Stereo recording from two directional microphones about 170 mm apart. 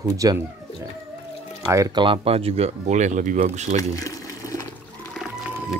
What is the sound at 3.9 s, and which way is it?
Water, 20° left (ahead or behind).